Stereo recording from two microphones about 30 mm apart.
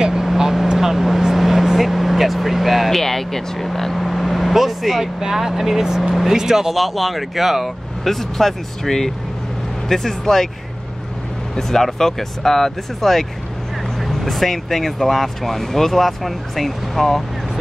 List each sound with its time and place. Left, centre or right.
0.0 s vehicle: centre
2.9 s speech: centre
5.0 s speech: centre
6.7 s speech: centre
8.0 s speech: centre
11.5 s speech: centre